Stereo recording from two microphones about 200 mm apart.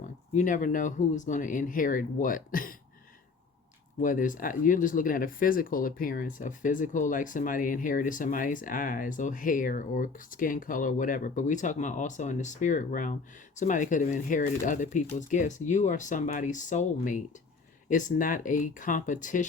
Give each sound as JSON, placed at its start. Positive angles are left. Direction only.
{"t": 0.3, "sound": "speech", "side_deg": 40}
{"t": 4.0, "sound": "speech", "side_deg": 40}